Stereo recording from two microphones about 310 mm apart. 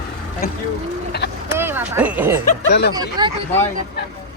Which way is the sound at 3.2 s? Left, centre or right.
Centre.